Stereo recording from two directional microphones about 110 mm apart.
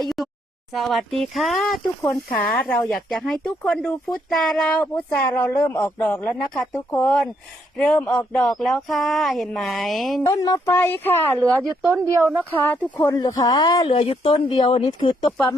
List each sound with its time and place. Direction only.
0.0 s a sound: centre (ahead or behind)
0.7 s speech: centre (ahead or behind)
2.9 s speech: 5° left (ahead or behind)
4.8 s speech: 15° left (ahead or behind)
7.8 s speech: 10° left (ahead or behind)
10.2 s speech: 30° left (ahead or behind)
10.8 s speech: 20° left (ahead or behind)
11.3 s speech: 20° right (ahead or behind)
12.5 s speech: 15° left (ahead or behind)
13.1 s speech: 40° left (ahead or behind)
13.8 s speech: 60° left (ahead or behind)
14.5 s speech: 45° left (ahead or behind)